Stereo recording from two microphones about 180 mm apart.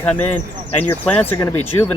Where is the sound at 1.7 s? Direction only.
20° left (ahead or behind).